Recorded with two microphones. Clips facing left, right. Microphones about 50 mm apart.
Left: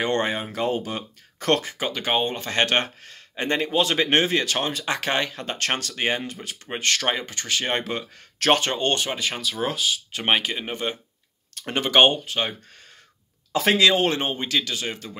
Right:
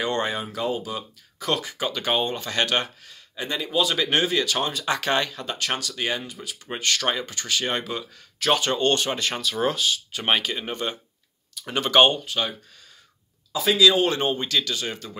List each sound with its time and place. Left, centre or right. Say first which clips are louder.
0.0 s speech: left 2 dB; left
0.7 s speech: left 2 dB; left
1.6 s speech: even; left
8.7 s speech: right 2 dB; left
9.1 s speech: right 1 dB; centre; by 12.5 s left
13.5 s speech: left 2 dB; left
13.7 s speech: right 3 dB; left